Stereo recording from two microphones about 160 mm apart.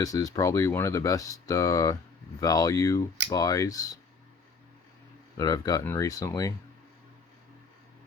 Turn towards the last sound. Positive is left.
turn(degrees=20)  # may be behind; listen again after turning